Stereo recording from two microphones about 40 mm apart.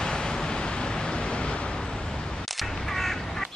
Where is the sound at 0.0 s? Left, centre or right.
Centre.